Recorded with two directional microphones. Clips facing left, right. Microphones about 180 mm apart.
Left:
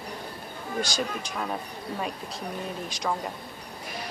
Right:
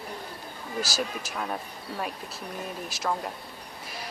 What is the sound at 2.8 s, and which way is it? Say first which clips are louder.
Speech: right 1 dB; 5° right (ahead or behind).